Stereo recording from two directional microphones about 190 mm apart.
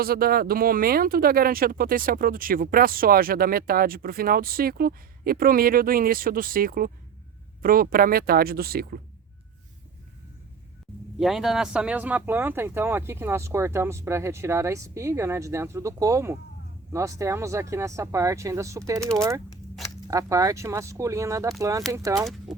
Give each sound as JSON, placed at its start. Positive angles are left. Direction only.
{"t": 0.0, "sound": "speech", "side_deg": -50}
{"t": 11.2, "sound": "speech", "side_deg": 0}